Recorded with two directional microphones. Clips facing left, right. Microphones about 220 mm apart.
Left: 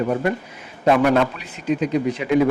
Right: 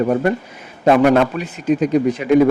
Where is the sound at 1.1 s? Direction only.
45° right (ahead or behind).